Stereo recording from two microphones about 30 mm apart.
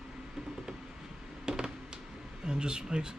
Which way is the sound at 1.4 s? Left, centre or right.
Right.